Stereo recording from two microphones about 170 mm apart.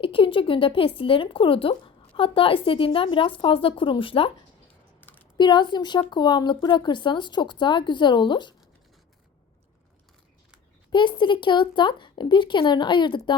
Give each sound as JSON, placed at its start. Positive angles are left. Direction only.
{"t": 0.0, "sound": "speech", "side_deg": 30}
{"t": 4.9, "sound": "typing", "side_deg": 10}
{"t": 5.4, "sound": "speech", "side_deg": 25}
{"t": 10.9, "sound": "speech", "side_deg": 30}